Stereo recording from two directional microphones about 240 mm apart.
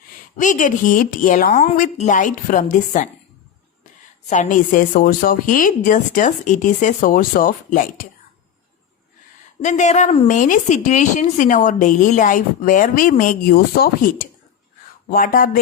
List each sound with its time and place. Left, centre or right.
0.3 s a woman's voice: left
4.3 s a woman's voice: left
9.6 s a woman's voice: left